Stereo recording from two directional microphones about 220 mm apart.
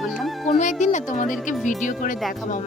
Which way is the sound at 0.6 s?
35° left (ahead or behind).